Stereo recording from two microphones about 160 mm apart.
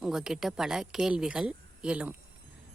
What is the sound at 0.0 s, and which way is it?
A woman's voice, 5° right (ahead or behind).